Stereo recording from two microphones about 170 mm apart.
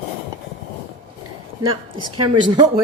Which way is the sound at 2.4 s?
25° right (ahead or behind).